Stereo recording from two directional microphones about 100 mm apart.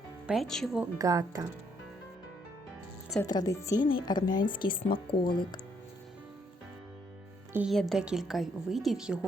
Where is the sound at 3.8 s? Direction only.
55° left (ahead or behind).